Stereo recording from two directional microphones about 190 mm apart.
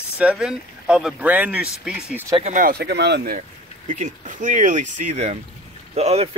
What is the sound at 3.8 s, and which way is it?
Speech, 40° right (ahead or behind).